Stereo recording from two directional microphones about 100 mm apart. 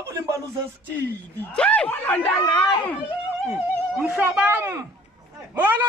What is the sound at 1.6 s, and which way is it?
Speech, 15° left (ahead or behind).